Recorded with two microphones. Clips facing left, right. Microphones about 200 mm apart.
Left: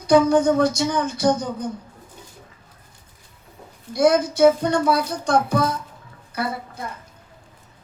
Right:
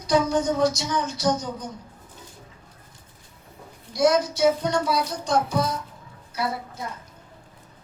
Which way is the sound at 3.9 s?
55° left (ahead or behind).